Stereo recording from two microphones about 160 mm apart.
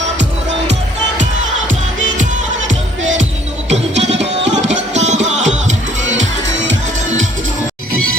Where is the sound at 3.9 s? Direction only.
90° right.